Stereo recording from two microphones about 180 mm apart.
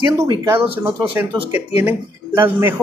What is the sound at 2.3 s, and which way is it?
Speech, 10° right (ahead or behind).